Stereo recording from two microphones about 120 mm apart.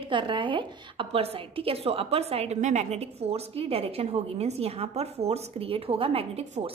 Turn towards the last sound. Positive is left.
turn(degrees=-50)  # may be behind; listen again after turning